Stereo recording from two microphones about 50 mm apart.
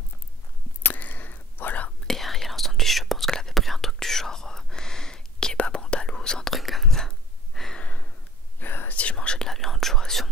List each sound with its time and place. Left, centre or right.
0.8 s whispering: left
2.0 s whispering: centre
6.5 s whispering: centre
7.8 s a sound: left
8.5 s whispering: left
9.1 s whispering: centre
9.5 s whispering: centre